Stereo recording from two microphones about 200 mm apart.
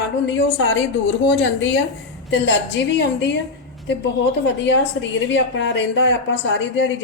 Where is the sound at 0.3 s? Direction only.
65° left (ahead or behind).